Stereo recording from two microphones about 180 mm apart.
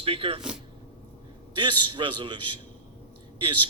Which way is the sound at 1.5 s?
25° right (ahead or behind).